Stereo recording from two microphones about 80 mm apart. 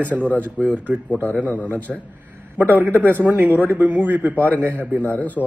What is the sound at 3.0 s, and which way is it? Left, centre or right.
A man's voice, right.